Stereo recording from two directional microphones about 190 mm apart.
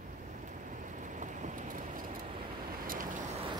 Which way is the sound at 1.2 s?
40° right (ahead or behind).